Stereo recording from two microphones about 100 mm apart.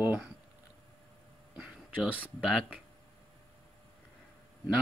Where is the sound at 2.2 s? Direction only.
5° right (ahead or behind).